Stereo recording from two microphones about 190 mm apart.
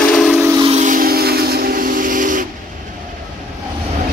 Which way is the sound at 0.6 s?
35° right (ahead or behind).